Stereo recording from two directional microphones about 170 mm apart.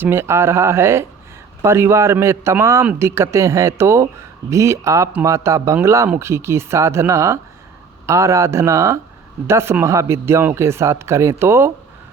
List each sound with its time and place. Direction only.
0.0 s a man's voice: 15° right (ahead or behind)